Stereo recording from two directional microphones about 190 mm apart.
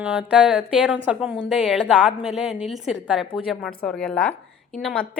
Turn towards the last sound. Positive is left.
turn(degrees=5)  # may be behind; listen again after turning